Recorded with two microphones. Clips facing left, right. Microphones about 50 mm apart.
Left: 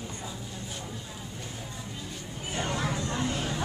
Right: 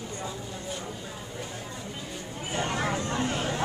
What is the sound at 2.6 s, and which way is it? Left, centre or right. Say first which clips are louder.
Vehicle: right 2 dB; right.